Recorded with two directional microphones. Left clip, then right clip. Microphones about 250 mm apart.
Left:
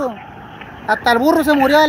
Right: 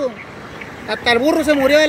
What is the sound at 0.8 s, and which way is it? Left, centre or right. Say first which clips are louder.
Speech: left 2 dB; left.